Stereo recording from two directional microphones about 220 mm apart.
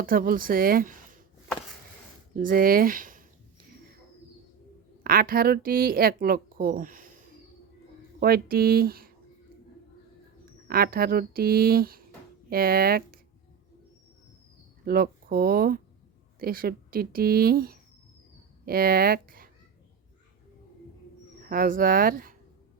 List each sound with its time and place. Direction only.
0.0 s a woman's voice: 40° right (ahead or behind)
2.3 s speech: 40° right (ahead or behind)
5.0 s a woman's voice: 40° right (ahead or behind)
8.2 s speech: 45° right (ahead or behind)
10.7 s speech: 45° right (ahead or behind)
14.8 s a woman's voice: 45° right (ahead or behind)
21.4 s a woman's voice: 40° right (ahead or behind)